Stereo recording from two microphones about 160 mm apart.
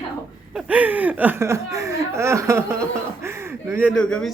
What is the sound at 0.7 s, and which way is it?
Speech, 10° right (ahead or behind).